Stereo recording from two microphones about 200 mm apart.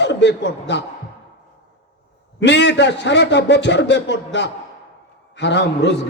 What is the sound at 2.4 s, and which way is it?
A man's voice, 60° left (ahead or behind).